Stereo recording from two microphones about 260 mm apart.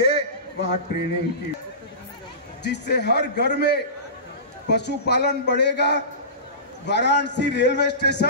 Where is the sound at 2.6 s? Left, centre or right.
Left.